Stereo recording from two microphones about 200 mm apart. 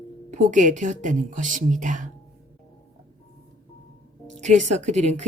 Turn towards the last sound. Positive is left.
turn(degrees=-35)  # may be behind; listen again after turning